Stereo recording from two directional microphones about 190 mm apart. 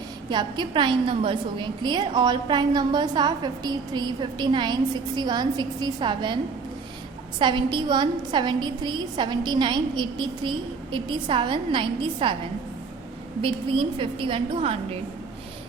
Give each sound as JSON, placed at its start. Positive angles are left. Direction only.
{"t": 0.3, "sound": "a woman's voice", "side_deg": -25}
{"t": 13.4, "sound": "a woman's voice", "side_deg": -30}